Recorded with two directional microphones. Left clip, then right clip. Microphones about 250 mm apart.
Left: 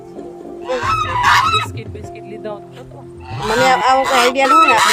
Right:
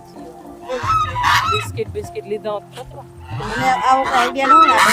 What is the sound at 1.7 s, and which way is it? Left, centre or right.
Speech, right.